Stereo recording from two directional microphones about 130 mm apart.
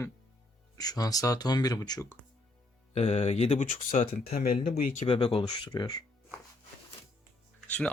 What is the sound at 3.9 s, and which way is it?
Speech, 75° left (ahead or behind).